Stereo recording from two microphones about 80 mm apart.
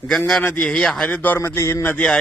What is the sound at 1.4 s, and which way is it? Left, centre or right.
Speech, left.